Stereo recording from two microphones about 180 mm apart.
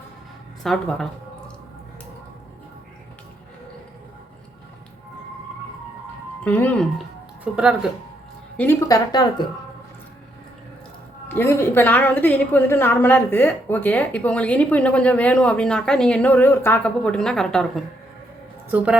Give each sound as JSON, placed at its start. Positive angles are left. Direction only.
{"t": 0.6, "sound": "speech", "side_deg": 0}
{"t": 6.4, "sound": "speech", "side_deg": 10}
{"t": 7.5, "sound": "speech", "side_deg": -5}
{"t": 8.5, "sound": "a woman's voice", "side_deg": 10}
{"t": 9.2, "sound": "speech", "side_deg": 25}
{"t": 11.3, "sound": "a woman's voice", "side_deg": 10}
{"t": 18.7, "sound": "a woman's voice", "side_deg": -10}